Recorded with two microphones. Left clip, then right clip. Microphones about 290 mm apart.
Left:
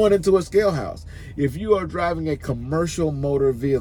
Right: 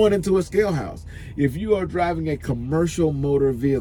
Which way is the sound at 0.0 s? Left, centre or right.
Centre.